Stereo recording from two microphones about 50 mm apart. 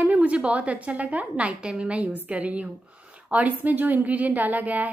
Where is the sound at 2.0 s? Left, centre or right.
Right.